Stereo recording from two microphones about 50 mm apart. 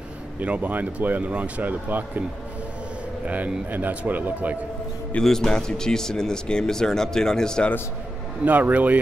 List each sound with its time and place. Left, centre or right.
0.4 s speech: right
3.3 s speech: right
5.2 s speech: centre
8.5 s speech: right